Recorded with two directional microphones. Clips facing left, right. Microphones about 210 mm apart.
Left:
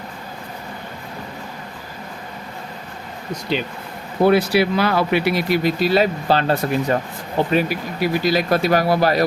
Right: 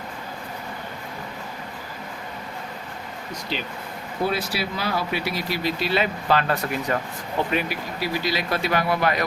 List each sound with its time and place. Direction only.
4.2 s speech: 60° left (ahead or behind); by 7.8 s 35° left (ahead or behind)
7.9 s speech: 50° left (ahead or behind)